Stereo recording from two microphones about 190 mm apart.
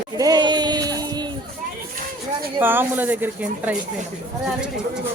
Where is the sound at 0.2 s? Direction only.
20° right (ahead or behind).